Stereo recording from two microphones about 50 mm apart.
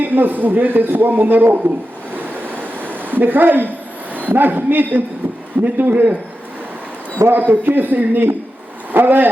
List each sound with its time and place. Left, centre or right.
0.0 s a man's voice: right
2.1 s a sound: right
4.1 s a man's voice: right
7.3 s a man's voice: right